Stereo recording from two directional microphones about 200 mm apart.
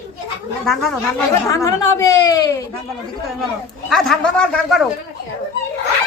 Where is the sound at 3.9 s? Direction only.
Centre (ahead or behind).